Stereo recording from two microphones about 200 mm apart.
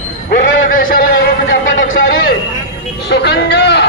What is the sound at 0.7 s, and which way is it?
Speech, 45° left (ahead or behind).